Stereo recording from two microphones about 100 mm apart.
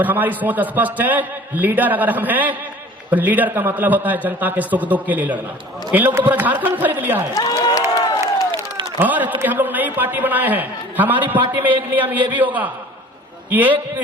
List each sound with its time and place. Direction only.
0.0 s a man's voice: 15° right (ahead or behind)
7.3 s crowd: 40° left (ahead or behind)
9.0 s a man's voice: 15° right (ahead or behind)